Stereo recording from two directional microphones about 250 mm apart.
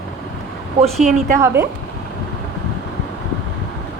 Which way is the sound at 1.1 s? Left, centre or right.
Right.